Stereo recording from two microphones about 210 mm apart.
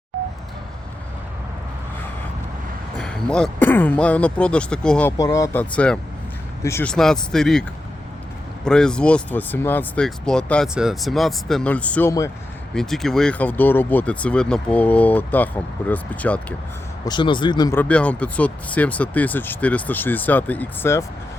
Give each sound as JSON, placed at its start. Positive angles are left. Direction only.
{"t": 3.0, "sound": "speech", "side_deg": 5}
{"t": 8.6, "sound": "speech", "side_deg": 5}
{"t": 12.7, "sound": "speech", "side_deg": 0}
{"t": 17.1, "sound": "speech", "side_deg": 20}
{"t": 17.7, "sound": "speech", "side_deg": 5}